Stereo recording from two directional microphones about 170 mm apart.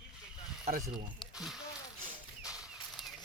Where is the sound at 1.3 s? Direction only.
Centre (ahead or behind).